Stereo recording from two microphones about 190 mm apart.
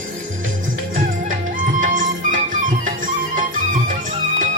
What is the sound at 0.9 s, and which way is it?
Music, 45° right (ahead or behind).